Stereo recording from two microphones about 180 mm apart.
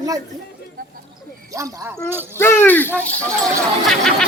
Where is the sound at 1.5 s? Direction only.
15° right (ahead or behind).